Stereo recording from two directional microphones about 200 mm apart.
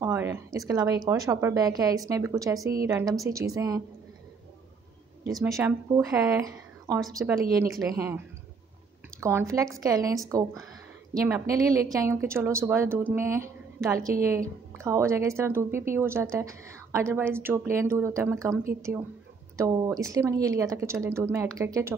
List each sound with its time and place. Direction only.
0.0 s a woman's voice: 10° right (ahead or behind)
5.2 s a woman's voice: 15° right (ahead or behind)
9.2 s a woman's voice: 15° right (ahead or behind)
11.2 s a woman's voice: 15° right (ahead or behind)